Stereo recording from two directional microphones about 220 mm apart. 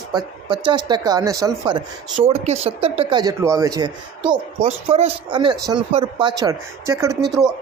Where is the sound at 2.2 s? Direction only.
30° right (ahead or behind).